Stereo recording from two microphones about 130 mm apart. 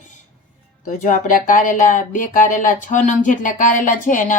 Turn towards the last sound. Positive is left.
turn(degrees=85)